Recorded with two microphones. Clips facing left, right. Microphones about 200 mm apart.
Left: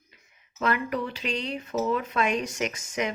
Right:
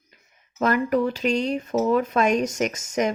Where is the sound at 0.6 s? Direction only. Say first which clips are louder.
Right 7 dB; 45° right (ahead or behind).